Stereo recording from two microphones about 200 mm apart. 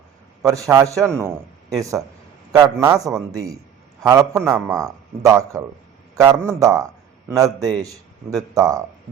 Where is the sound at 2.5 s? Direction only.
20° right (ahead or behind).